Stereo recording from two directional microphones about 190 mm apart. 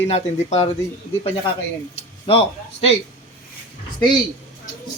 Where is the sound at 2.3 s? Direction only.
30° left (ahead or behind).